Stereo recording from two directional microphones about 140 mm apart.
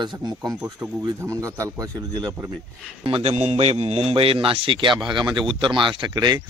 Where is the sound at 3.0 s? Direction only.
40° right (ahead or behind).